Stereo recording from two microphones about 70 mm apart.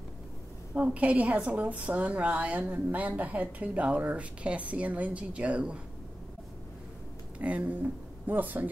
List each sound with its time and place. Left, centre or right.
0.7 s a woman's voice: centre
7.3 s speech: right